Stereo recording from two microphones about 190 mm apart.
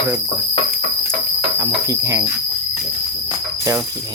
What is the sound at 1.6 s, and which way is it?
Cricket, 15° right (ahead or behind).